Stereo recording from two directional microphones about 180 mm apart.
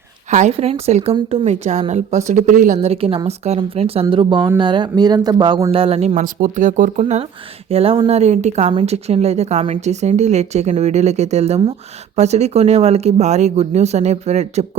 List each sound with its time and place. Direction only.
0.3 s a woman's voice: 40° right (ahead or behind); by 5.7 s 20° right (ahead or behind)
5.7 s a woman's voice: 35° right (ahead or behind)
6.1 s a woman's voice: 45° right (ahead or behind)